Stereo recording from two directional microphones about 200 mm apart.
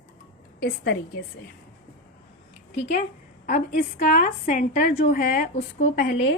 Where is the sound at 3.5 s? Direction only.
40° left (ahead or behind); by 6.4 s 55° left (ahead or behind).